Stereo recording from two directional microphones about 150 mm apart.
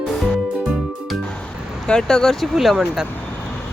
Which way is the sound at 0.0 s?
Centre (ahead or behind).